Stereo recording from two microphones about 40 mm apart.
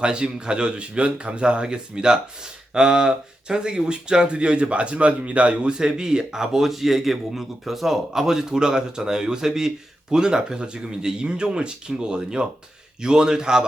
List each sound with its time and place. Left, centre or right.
0.0 s speech: right
5.7 s a man's voice: centre